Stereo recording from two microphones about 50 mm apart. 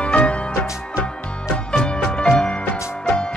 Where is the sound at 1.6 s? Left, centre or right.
Centre.